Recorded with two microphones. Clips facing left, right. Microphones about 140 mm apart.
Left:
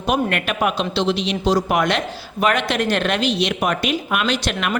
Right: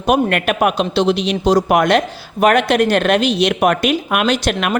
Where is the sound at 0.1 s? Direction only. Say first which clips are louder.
Right 5 dB; 55° right (ahead or behind).